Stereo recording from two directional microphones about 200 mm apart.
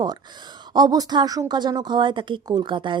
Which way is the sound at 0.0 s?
20° right (ahead or behind).